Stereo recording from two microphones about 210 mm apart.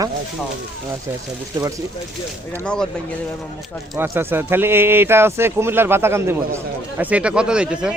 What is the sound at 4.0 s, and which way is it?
Speech, 10° right (ahead or behind).